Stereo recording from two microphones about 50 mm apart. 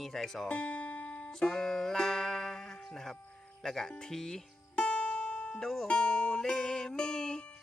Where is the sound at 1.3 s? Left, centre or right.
Centre.